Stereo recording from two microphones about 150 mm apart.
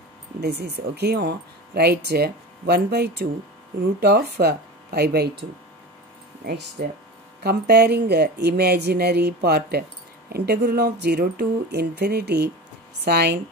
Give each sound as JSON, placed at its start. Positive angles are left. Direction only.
{"t": 0.4, "sound": "speech", "side_deg": -90}